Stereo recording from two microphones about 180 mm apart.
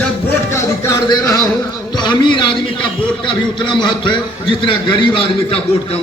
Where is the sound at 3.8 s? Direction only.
25° left (ahead or behind).